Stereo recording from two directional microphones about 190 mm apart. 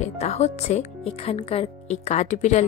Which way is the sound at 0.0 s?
35° left (ahead or behind).